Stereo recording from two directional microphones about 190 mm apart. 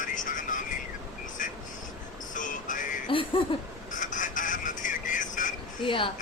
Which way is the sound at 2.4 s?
45° left (ahead or behind).